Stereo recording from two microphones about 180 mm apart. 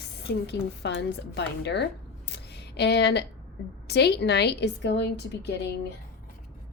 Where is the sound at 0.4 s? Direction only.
70° left (ahead or behind).